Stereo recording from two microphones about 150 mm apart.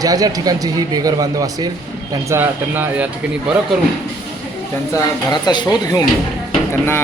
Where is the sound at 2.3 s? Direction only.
15° right (ahead or behind).